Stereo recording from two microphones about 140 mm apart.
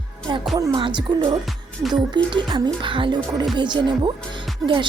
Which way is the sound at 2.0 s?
35° right (ahead or behind).